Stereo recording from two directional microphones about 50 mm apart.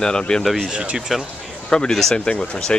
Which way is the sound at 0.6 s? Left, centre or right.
Centre.